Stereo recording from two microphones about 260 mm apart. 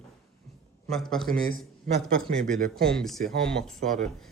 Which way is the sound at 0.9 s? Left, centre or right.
Centre.